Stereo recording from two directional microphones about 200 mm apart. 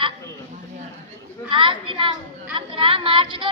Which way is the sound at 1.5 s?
25° right (ahead or behind).